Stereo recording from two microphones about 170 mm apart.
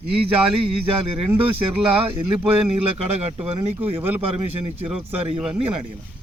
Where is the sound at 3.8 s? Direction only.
10° right (ahead or behind).